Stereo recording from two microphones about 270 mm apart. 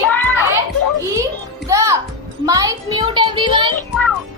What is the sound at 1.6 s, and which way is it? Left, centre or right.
Speech, centre.